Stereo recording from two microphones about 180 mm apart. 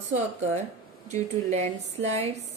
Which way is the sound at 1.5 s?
40° right (ahead or behind).